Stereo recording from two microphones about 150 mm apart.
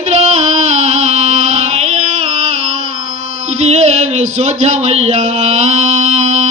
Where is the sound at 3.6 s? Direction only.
45° right (ahead or behind).